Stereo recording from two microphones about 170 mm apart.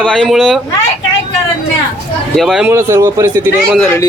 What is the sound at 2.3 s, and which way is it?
Speech, centre (ahead or behind).